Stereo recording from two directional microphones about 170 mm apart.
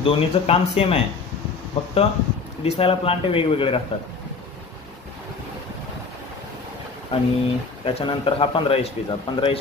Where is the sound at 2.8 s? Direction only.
35° left (ahead or behind).